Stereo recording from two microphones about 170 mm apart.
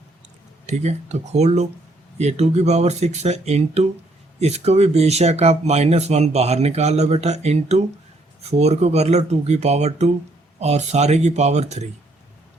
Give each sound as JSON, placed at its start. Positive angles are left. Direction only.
{"t": 0.7, "sound": "speech", "side_deg": -40}